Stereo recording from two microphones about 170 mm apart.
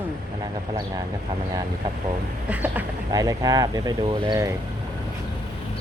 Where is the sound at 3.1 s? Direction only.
20° right (ahead or behind).